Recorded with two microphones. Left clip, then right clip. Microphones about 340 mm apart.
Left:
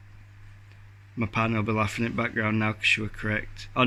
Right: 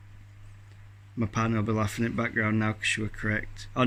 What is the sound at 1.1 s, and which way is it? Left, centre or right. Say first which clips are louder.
Speech: left 3 dB; centre.